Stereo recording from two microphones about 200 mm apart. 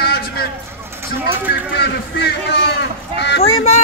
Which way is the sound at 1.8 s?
55° left (ahead or behind).